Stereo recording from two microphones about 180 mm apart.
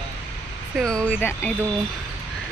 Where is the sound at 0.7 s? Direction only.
5° left (ahead or behind).